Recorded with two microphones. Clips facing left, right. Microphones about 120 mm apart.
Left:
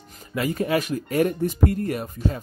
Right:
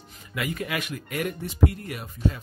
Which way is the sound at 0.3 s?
35° left (ahead or behind).